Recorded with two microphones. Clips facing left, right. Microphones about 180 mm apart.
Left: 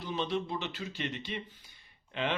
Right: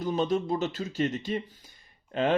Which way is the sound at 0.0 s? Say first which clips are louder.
Right 7 dB; 45° right (ahead or behind).